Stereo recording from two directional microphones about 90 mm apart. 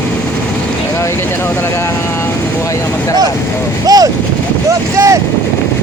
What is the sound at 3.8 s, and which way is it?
Boat, 45° right (ahead or behind).